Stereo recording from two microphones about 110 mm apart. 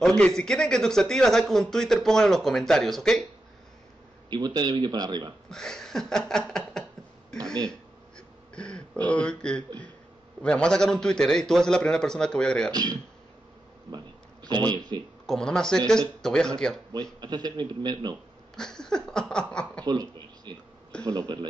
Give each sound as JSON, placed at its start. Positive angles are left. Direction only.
{"t": 0.0, "sound": "speech", "side_deg": 5}
{"t": 4.3, "sound": "a man's voice", "side_deg": -40}
{"t": 5.5, "sound": "a sound", "side_deg": 5}
{"t": 8.5, "sound": "a man's voice", "side_deg": 10}
{"t": 12.7, "sound": "a man's voice", "side_deg": -35}
{"t": 13.8, "sound": "a sound", "side_deg": -40}
{"t": 14.9, "sound": "speech", "side_deg": -45}
{"t": 15.2, "sound": "a man's voice", "side_deg": 5}
{"t": 16.9, "sound": "a man's voice", "side_deg": -40}
{"t": 18.6, "sound": "a man's voice", "side_deg": 5}
{"t": 19.8, "sound": "speech", "side_deg": -35}